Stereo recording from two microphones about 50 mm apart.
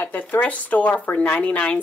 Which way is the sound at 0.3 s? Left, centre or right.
Left.